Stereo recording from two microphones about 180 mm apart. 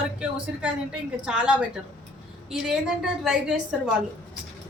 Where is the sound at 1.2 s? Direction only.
5° right (ahead or behind).